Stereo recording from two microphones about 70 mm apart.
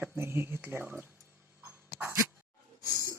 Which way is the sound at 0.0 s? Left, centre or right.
Right.